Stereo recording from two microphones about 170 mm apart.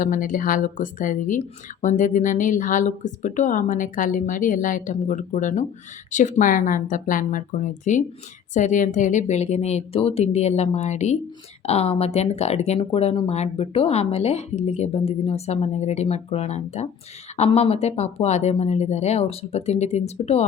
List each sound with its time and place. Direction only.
0.0 s speech: 50° left (ahead or behind)